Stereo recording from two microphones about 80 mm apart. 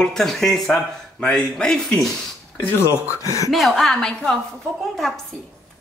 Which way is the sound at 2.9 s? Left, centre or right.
Right.